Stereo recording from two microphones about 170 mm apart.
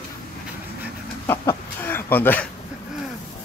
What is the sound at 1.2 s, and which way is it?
Chicken, 15° left (ahead or behind).